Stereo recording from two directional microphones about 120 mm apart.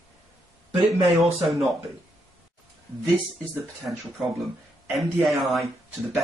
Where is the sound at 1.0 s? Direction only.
Centre (ahead or behind).